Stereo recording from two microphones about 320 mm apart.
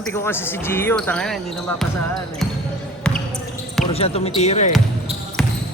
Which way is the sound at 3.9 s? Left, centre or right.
Centre.